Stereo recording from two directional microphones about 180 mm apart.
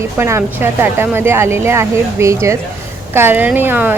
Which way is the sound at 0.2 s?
15° right (ahead or behind).